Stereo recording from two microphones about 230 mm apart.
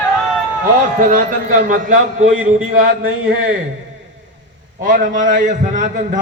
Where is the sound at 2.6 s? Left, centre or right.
Right.